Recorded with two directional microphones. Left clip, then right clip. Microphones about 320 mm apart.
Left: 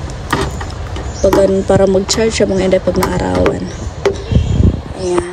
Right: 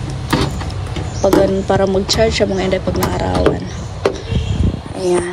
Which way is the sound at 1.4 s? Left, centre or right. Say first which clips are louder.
Left 4 dB; centre.